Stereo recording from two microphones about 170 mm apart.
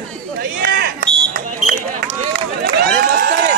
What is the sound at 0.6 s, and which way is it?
Fire alarm, 60° right (ahead or behind).